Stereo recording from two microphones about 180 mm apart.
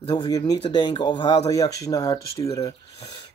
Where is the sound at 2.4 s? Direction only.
30° left (ahead or behind).